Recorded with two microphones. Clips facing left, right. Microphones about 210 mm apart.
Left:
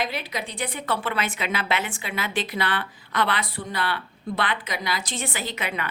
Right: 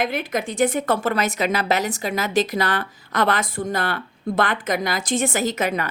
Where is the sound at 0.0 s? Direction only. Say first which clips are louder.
Right 6 dB; 50° right (ahead or behind).